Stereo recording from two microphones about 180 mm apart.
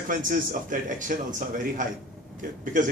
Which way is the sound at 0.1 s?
50° right (ahead or behind).